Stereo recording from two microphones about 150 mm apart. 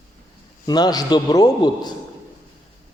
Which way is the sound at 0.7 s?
25° left (ahead or behind).